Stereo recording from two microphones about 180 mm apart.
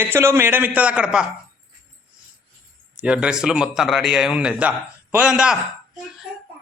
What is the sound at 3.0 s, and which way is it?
Speech, 5° right (ahead or behind).